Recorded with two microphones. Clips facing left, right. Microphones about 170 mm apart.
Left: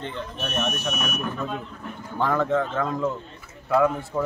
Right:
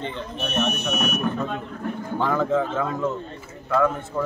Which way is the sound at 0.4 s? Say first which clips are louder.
Right 3 dB; 5° left (ahead or behind).